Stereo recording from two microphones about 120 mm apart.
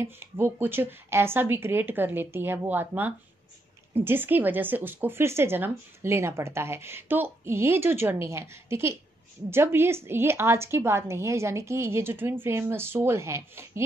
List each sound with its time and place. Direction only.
0.0 s speech: 20° right (ahead or behind)